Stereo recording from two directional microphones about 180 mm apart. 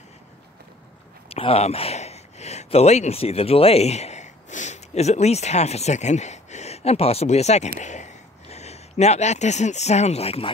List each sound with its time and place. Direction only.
1.3 s speech: 35° left (ahead or behind)